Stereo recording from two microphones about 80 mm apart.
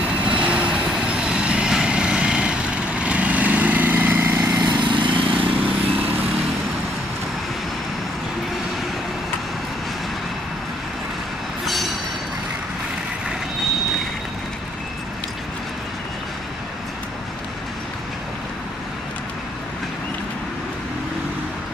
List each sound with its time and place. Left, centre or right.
0.3 s vehicle: centre
4.6 s vehicle: right